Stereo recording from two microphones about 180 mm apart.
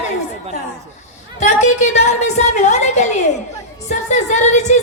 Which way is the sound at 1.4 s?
40° left (ahead or behind).